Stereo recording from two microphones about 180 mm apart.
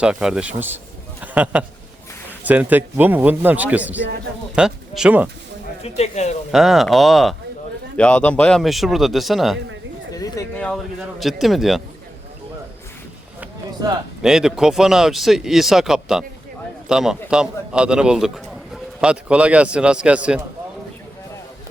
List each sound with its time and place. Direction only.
0.0 s speech: 5° right (ahead or behind)
5.8 s speech: 35° left (ahead or behind)
6.5 s speech: centre (ahead or behind)
10.5 s a sound: 5° left (ahead or behind)
11.2 s speech: centre (ahead or behind)
14.2 s speech: 5° right (ahead or behind)